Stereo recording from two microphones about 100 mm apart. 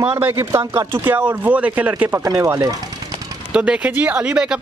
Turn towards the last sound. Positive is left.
turn(degrees=-10)  # may be behind; listen again after turning